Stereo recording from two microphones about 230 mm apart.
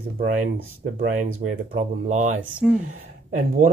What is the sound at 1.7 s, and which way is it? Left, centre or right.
Speech, right.